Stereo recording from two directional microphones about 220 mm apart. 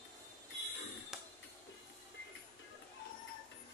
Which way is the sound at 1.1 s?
Centre (ahead or behind).